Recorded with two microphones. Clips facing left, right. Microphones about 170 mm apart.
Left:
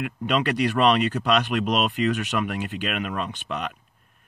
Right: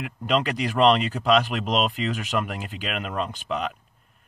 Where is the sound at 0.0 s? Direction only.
Centre (ahead or behind).